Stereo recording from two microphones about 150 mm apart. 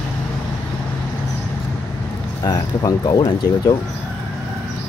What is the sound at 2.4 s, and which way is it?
Speech, 25° left (ahead or behind).